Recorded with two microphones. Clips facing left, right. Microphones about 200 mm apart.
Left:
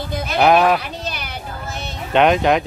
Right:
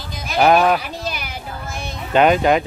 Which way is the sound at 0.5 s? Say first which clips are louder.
Left 1 dB; centre (ahead or behind).